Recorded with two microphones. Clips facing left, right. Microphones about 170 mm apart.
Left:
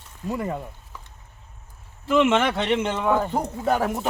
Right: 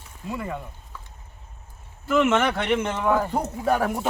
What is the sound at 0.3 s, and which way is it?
Speech, 35° left (ahead or behind).